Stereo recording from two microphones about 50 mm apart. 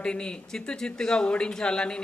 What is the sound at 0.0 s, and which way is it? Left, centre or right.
Speech, centre.